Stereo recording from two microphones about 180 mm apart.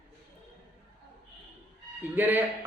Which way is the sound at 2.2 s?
10° right (ahead or behind).